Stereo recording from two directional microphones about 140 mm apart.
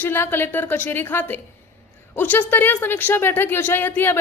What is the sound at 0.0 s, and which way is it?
Speech, 15° left (ahead or behind).